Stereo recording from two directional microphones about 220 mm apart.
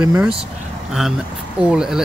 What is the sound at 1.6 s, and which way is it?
Speech, 5° right (ahead or behind).